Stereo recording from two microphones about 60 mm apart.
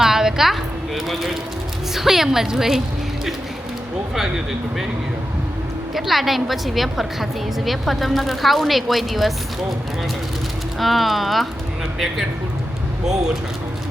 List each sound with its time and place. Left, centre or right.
0.0 s a sound: centre
2.0 s a woman's voice: centre
5.9 s a woman's voice: centre
10.8 s a woman's voice: centre